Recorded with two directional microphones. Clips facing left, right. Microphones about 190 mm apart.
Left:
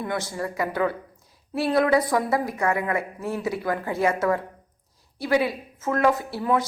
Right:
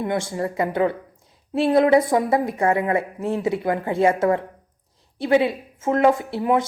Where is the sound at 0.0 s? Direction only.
25° right (ahead or behind).